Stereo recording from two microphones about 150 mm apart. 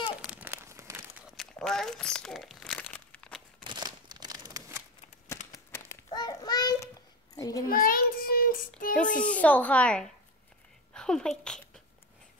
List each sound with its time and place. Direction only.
0.3 s crumpling: 15° right (ahead or behind)
1.3 s speech: 5° left (ahead or behind)
2.8 s crumpling: 10° left (ahead or behind)
3.6 s crumpling: 30° right (ahead or behind)
5.5 s a sound: 15° left (ahead or behind)
6.0 s a child's voice: 25° left (ahead or behind)
7.6 s child singing: 75° left (ahead or behind)
9.2 s speech: 10° left (ahead or behind)
10.9 s a sound: 5° left (ahead or behind)